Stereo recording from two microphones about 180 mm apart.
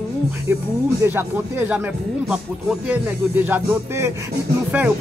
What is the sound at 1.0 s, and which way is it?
Speech, 10° right (ahead or behind).